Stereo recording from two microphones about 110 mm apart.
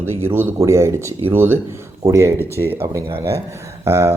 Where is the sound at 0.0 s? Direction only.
20° right (ahead or behind).